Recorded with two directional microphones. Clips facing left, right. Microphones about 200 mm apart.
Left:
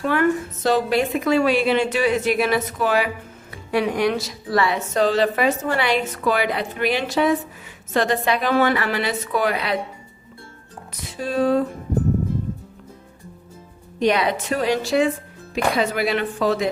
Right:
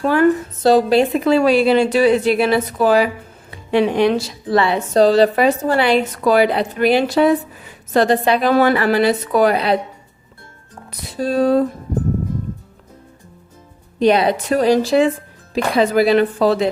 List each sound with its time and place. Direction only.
0.0 s a woman's voice: 35° right (ahead or behind)
11.2 s a woman's voice: 35° right (ahead or behind)
14.0 s a woman's voice: 30° right (ahead or behind)